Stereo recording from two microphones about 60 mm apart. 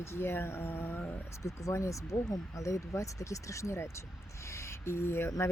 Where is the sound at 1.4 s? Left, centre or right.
Left.